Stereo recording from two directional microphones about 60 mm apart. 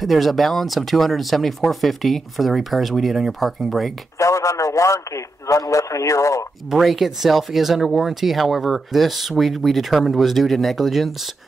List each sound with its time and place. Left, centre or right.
0.0 s speech: centre
4.2 s a man's voice: left
6.7 s speech: centre